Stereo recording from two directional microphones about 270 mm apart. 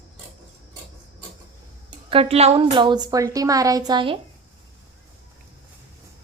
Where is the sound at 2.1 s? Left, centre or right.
Right.